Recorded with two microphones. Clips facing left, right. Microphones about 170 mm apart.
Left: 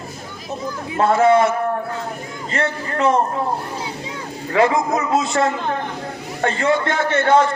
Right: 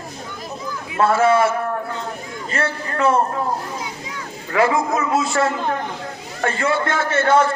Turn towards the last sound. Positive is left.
turn(degrees=20)  # may be behind; listen again after turning